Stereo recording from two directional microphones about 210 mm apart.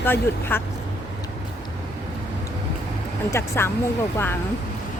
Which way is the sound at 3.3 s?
10° left (ahead or behind).